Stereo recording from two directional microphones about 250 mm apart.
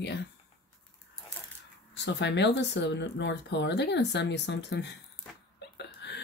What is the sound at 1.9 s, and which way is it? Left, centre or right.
Speech, left.